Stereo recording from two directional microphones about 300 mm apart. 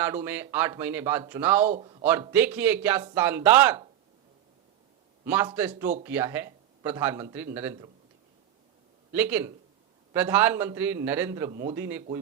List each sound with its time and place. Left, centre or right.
0.0 s speech: centre
1.7 s a man's voice: centre
2.0 s speech: centre
5.2 s a man's voice: centre
9.1 s speech: centre